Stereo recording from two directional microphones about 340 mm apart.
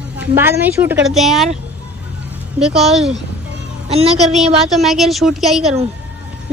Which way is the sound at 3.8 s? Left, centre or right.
Centre.